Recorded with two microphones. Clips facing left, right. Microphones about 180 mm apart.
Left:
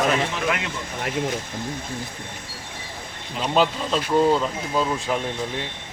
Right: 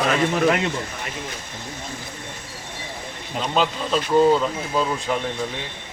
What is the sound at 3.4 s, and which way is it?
Speech, 5° left (ahead or behind).